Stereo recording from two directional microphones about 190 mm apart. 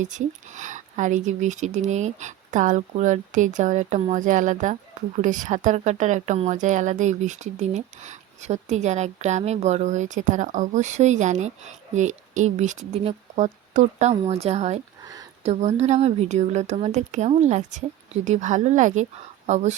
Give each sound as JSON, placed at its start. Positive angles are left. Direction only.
{"t": 0.0, "sound": "speech", "side_deg": -40}
{"t": 15.0, "sound": "a sound", "side_deg": -20}
{"t": 15.4, "sound": "speech", "side_deg": -35}